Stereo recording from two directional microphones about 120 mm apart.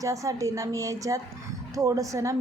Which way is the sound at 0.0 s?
25° right (ahead or behind).